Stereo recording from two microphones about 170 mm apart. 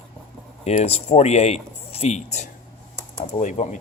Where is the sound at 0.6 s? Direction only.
40° left (ahead or behind).